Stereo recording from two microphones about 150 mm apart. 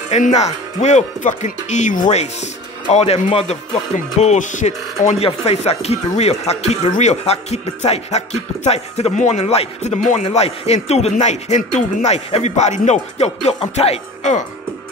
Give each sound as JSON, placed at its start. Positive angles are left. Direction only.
{"t": 0.1, "sound": "speech", "side_deg": 50}
{"t": 5.0, "sound": "speech", "side_deg": 45}